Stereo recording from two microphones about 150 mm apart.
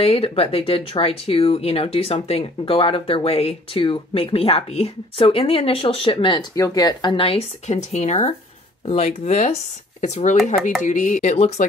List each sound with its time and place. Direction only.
0.0 s speech: 40° left (ahead or behind)